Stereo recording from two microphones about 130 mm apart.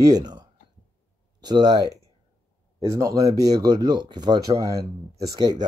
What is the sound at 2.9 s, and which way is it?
Speech, 25° right (ahead or behind).